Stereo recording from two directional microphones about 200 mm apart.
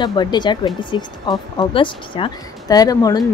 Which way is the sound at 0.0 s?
20° left (ahead or behind).